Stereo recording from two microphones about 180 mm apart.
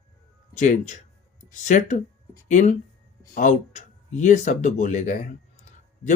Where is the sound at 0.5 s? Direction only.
40° left (ahead or behind).